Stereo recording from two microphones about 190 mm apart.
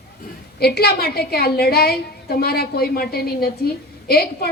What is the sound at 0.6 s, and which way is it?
A woman's voice, 55° left (ahead or behind).